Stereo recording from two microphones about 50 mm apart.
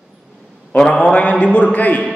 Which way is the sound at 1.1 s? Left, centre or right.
Left.